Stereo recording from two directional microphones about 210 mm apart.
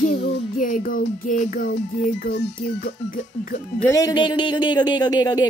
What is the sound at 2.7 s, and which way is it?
Speech, 40° left (ahead or behind).